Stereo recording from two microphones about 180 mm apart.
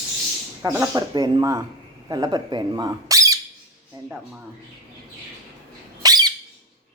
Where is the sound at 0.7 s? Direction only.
20° right (ahead or behind).